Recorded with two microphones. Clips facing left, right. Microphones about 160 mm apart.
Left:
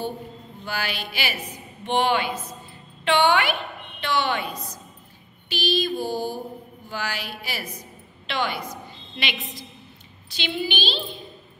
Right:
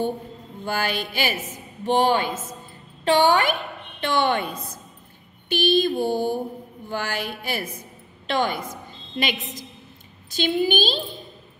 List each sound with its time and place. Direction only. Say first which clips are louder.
0.7 s a woman's voice: right 5 dB; 50° right (ahead or behind)
5.5 s mantra: right 5 dB; 55° right (ahead or behind)
6.9 s speech: right 3 dB; 50° right (ahead or behind)
10.3 s speech: right 7 dB; 45° right (ahead or behind)